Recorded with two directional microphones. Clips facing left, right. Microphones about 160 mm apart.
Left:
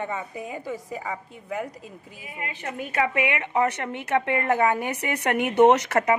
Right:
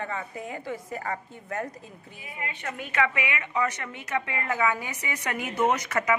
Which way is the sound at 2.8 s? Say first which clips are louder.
Left 3 dB; 45° left (ahead or behind).